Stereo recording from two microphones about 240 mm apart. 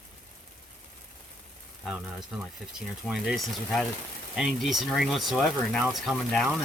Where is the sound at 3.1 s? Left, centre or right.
Centre.